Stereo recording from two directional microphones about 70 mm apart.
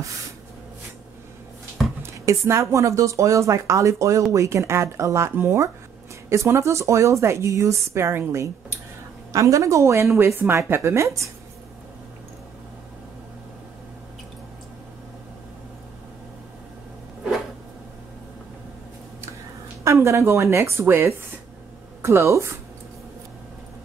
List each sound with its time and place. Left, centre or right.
2.0 s speech: right
9.3 s speech: right
19.8 s speech: right